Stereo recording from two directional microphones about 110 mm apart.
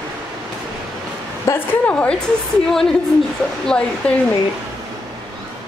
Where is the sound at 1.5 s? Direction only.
30° left (ahead or behind).